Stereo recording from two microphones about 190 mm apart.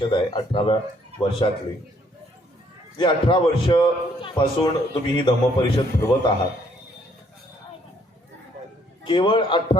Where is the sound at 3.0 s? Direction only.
25° left (ahead or behind).